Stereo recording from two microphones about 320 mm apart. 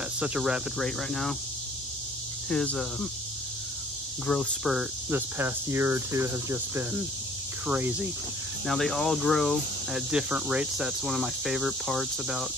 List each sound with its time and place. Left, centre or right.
0.2 s speech: centre
2.5 s speech: centre
4.3 s cricket: centre
7.6 s speech: centre